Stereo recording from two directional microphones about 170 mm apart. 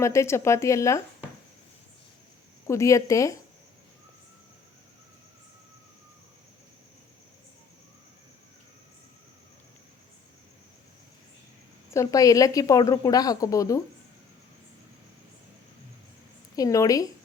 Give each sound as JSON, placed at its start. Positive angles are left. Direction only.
{"t": 0.0, "sound": "speech", "side_deg": 15}
{"t": 2.6, "sound": "speech", "side_deg": 15}
{"t": 11.9, "sound": "a woman's voice", "side_deg": 20}
{"t": 16.6, "sound": "a woman's voice", "side_deg": 20}